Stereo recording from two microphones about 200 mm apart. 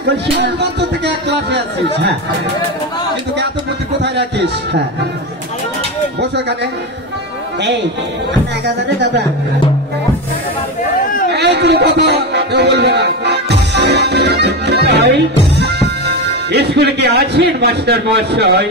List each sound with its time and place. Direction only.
0.0 s speech: 60° right (ahead or behind)
4.0 s speech: 60° right (ahead or behind)
8.8 s speech: 60° right (ahead or behind)
11.3 s a man's voice: 55° right (ahead or behind)